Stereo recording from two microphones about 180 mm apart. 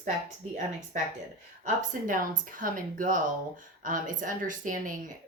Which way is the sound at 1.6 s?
50° right (ahead or behind).